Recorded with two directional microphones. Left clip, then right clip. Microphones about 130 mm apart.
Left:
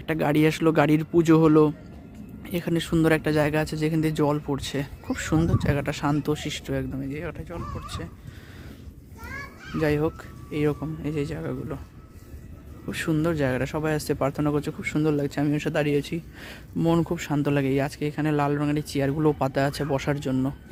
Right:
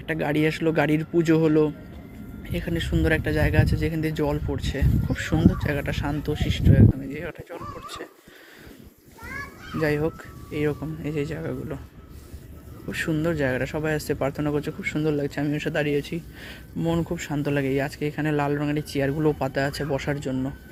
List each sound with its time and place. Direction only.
0.1 s speech: 50° left (ahead or behind)
7.1 s speech: 35° left (ahead or behind)
9.8 s speech: 40° left (ahead or behind)
10.8 s speech: 30° left (ahead or behind)
12.9 s speech: 40° left (ahead or behind)
16.7 s speech: 65° left (ahead or behind)